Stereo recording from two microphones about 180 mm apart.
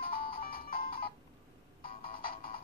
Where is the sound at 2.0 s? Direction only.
55° left (ahead or behind).